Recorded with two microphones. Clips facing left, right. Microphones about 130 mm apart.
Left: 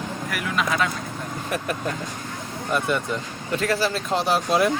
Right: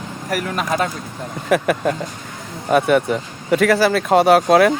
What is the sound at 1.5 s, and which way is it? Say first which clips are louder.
Speech: right 12 dB; 75° right (ahead or behind).